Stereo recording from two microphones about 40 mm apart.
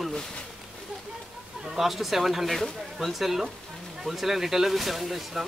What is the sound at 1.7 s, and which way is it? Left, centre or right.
Speech, centre.